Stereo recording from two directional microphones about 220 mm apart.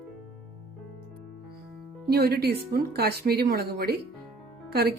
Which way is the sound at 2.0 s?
45° right (ahead or behind).